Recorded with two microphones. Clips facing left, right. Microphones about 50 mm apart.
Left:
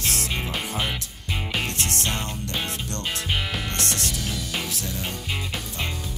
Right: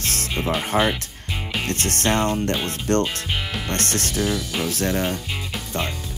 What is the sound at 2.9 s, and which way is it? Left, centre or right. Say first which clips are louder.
Speech: right 10 dB; right.